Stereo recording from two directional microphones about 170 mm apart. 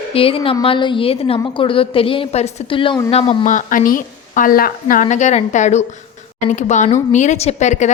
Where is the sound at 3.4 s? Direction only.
50° left (ahead or behind).